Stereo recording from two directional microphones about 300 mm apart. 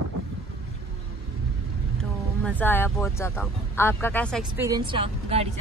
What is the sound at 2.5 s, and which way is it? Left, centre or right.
Speech, centre.